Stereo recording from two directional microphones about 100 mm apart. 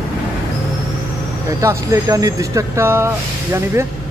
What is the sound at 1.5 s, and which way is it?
Speech, 30° right (ahead or behind).